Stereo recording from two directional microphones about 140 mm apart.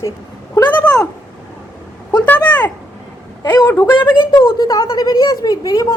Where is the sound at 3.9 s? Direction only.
35° left (ahead or behind).